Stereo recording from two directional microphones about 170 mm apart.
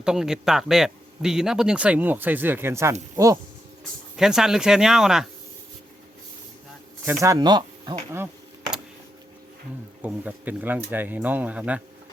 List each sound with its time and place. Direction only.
0.0 s speech: 5° right (ahead or behind)
4.2 s speech: 5° right (ahead or behind)
7.0 s speech: 15° right (ahead or behind)
10.0 s speech: 10° right (ahead or behind)